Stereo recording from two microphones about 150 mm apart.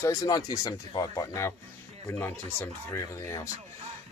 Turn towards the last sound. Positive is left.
turn(degrees=20)  # may be behind; listen again after turning